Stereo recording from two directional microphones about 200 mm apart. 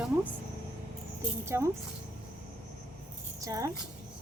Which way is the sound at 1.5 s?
15° right (ahead or behind).